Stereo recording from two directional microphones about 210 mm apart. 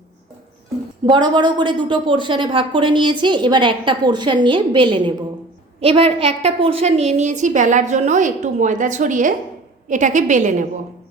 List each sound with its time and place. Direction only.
1.0 s a woman's voice: 20° right (ahead or behind); by 10.7 s 35° right (ahead or behind)